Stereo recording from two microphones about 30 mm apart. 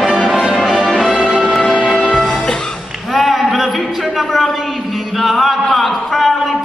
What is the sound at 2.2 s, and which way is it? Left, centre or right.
Music, centre.